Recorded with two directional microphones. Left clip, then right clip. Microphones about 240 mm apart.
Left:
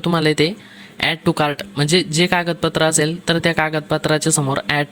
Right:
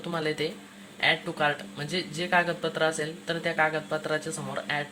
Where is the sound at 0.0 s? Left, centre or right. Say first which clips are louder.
Left 13 dB; left.